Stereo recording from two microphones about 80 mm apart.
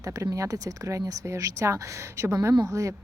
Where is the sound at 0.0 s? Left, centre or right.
Right.